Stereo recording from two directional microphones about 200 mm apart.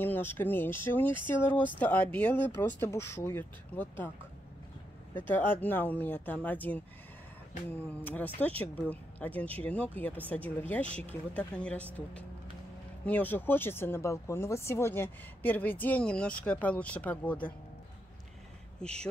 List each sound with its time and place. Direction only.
0.0 s speech: 10° left (ahead or behind)
5.1 s speech: 10° left (ahead or behind)
10.9 s speech: 30° right (ahead or behind)
11.3 s speech: 5° left (ahead or behind)
18.8 s speech: 5° left (ahead or behind)